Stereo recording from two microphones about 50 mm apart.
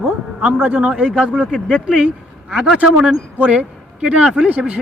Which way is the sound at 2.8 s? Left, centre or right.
Centre.